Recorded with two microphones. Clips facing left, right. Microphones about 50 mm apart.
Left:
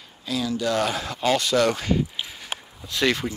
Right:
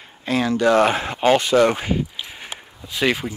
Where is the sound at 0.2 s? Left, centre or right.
Right.